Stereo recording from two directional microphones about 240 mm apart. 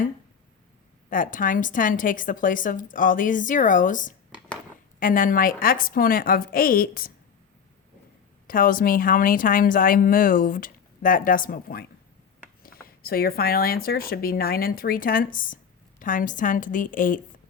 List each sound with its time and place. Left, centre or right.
1.1 s speech: left
8.4 s speech: left